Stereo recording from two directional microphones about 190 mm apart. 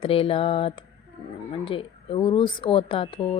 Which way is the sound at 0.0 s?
30° left (ahead or behind).